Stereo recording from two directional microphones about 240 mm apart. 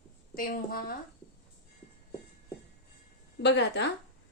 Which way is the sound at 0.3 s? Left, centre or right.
Left.